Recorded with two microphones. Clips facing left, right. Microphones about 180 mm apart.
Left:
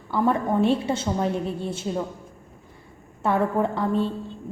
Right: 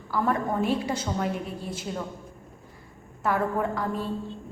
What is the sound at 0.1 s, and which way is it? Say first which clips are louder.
A woman's voice: left 4 dB; 25° left (ahead or behind).